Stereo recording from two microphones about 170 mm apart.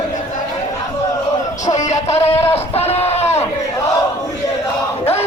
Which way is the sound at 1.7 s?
40° left (ahead or behind).